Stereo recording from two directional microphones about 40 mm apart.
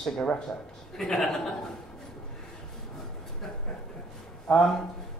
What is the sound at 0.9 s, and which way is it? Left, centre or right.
Speech, centre.